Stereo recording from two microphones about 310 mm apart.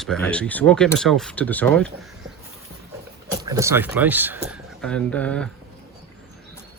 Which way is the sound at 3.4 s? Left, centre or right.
Centre.